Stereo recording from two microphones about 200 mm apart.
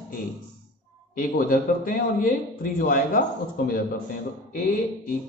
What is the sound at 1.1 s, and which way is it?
A man's voice, 50° left (ahead or behind).